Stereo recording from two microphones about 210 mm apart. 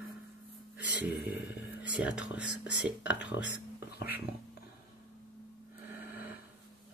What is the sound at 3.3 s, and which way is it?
Speech, 60° left (ahead or behind).